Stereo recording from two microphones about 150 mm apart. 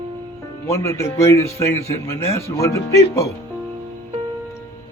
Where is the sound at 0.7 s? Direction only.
20° left (ahead or behind).